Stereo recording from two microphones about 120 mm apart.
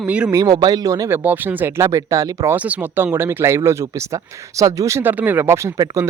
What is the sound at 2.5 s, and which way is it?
Speech, 15° right (ahead or behind).